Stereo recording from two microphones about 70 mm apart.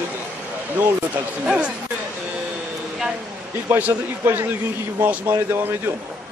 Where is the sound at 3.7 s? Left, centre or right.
Right.